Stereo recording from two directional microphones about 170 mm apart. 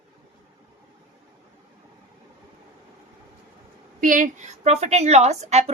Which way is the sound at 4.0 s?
50° right (ahead or behind).